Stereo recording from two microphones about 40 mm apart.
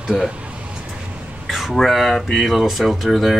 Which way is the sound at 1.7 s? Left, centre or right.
Centre.